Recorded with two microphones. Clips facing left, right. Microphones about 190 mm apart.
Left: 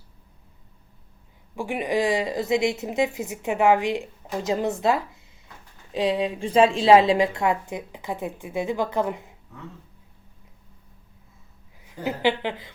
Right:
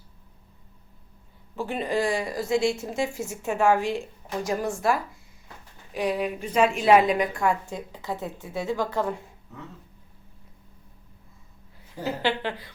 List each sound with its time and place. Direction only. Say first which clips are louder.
1.5 s a woman's voice: left 2 dB; 15° left (ahead or behind)
12.0 s a woman's voice: left 3 dB; 15° left (ahead or behind)